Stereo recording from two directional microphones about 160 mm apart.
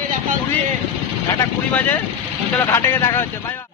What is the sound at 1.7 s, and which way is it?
Speech, 10° left (ahead or behind).